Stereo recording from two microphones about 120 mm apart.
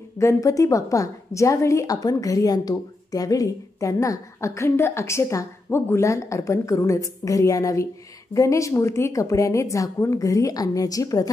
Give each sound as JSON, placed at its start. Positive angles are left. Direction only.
{"t": 0.2, "sound": "a woman's voice", "side_deg": 25}